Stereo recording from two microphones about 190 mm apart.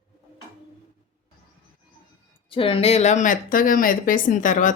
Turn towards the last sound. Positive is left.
turn(degrees=40)  # may be behind; listen again after turning